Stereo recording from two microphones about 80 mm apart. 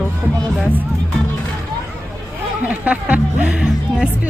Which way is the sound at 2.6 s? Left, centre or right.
Centre.